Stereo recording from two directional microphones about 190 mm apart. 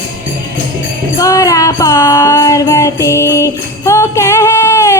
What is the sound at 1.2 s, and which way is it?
Music, 20° left (ahead or behind).